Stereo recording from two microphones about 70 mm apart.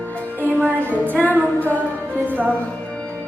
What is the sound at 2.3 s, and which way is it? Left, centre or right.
Music, right.